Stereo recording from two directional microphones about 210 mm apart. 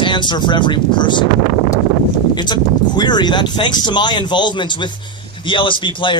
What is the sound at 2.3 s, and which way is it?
Speech, 20° left (ahead or behind).